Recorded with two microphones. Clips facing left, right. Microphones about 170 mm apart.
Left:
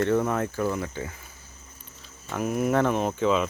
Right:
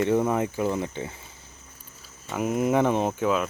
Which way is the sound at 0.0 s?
15° right (ahead or behind).